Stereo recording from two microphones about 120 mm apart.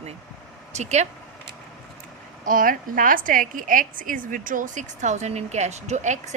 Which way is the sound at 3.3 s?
90° right.